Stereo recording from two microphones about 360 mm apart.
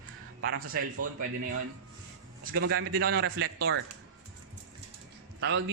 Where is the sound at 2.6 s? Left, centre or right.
Right.